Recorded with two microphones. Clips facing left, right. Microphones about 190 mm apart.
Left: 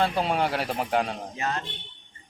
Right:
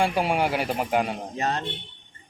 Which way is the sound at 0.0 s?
10° right (ahead or behind).